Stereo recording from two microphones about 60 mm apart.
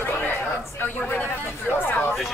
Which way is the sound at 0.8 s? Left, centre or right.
Left.